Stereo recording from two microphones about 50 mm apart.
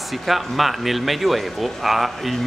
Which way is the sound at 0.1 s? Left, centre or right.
Centre.